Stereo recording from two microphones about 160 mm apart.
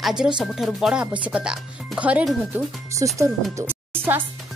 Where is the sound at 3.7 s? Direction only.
15° right (ahead or behind).